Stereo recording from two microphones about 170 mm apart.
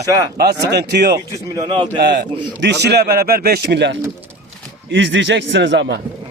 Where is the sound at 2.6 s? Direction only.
80° right.